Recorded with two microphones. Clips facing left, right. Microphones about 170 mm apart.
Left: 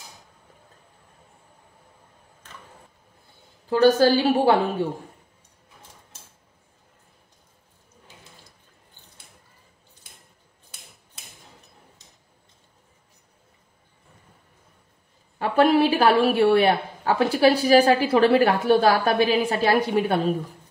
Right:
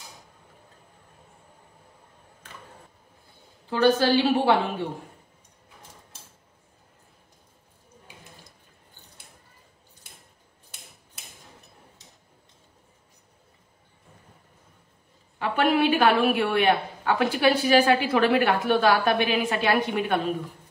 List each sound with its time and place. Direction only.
3.8 s a woman's voice: 40° left (ahead or behind)
8.1 s a sound: 15° right (ahead or behind)
15.3 s a woman's voice: 40° left (ahead or behind)